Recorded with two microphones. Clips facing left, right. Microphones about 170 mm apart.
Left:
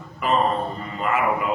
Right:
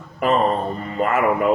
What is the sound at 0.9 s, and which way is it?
Speech, 45° right (ahead or behind).